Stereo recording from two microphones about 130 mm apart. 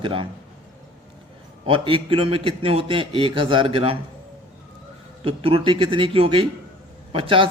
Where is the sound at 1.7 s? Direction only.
40° right (ahead or behind).